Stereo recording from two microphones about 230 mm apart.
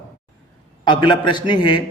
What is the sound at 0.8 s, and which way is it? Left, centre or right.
A man's voice, centre.